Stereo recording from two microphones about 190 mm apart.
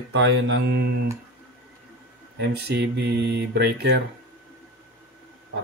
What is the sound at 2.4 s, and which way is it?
Speech, 60° right (ahead or behind).